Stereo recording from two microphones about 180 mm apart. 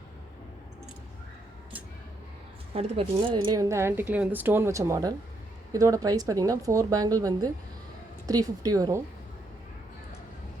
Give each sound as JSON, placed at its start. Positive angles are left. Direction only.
{"t": 2.7, "sound": "a woman's voice", "side_deg": -30}